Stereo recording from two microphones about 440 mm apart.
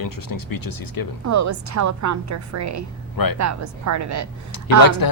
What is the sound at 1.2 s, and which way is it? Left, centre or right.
Speech, right.